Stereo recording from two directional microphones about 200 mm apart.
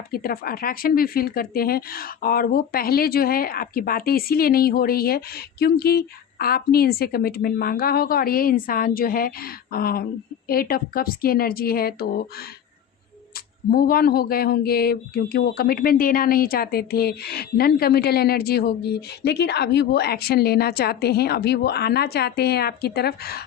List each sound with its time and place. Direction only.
0.1 s speech: 50° left (ahead or behind)
13.7 s speech: 45° left (ahead or behind)